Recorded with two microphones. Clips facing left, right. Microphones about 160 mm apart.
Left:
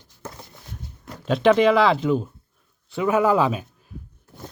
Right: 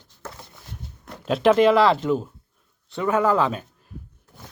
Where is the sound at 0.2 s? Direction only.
15° left (ahead or behind).